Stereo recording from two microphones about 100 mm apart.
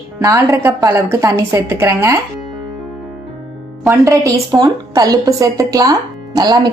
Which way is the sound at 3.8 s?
30° right (ahead or behind).